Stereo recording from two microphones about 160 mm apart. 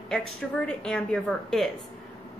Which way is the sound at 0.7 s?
5° left (ahead or behind).